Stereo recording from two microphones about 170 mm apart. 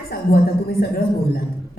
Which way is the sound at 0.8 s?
60° left (ahead or behind).